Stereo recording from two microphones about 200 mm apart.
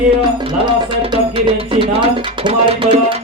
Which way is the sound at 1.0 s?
25° right (ahead or behind).